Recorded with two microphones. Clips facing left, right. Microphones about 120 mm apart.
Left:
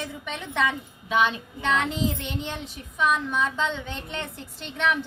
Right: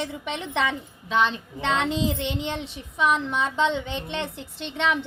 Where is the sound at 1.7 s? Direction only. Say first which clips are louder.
Right 1 dB; 25° right (ahead or behind).